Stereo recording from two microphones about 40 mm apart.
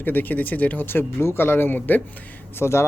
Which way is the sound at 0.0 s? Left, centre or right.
Left.